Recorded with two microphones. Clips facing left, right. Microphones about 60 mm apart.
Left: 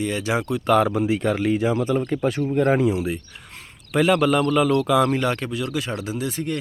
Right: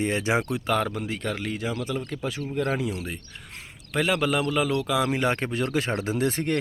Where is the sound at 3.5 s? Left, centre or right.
Centre.